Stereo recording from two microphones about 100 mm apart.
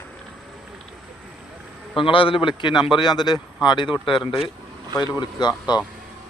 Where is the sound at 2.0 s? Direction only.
60° left (ahead or behind).